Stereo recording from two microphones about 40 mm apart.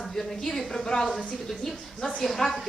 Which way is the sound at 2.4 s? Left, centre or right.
Left.